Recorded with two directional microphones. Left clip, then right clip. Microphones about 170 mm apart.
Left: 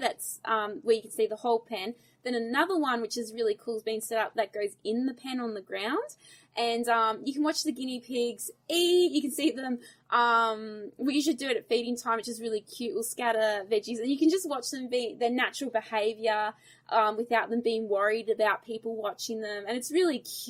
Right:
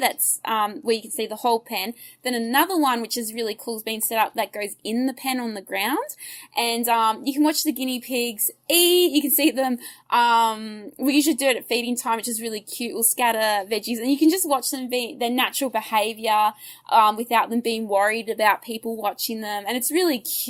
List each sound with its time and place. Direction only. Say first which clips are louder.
0.0 s a woman's voice: right 8 dB; 20° right (ahead or behind)